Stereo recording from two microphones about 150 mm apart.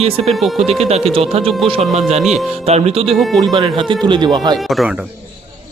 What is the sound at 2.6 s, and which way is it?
Speech, 45° right (ahead or behind).